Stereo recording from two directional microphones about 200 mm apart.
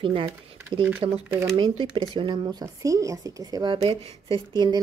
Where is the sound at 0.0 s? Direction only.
25° right (ahead or behind).